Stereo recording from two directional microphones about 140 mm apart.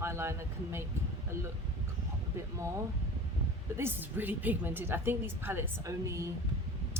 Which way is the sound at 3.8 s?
15° right (ahead or behind).